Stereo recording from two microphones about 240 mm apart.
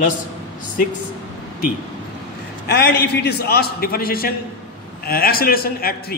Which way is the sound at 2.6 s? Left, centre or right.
Left.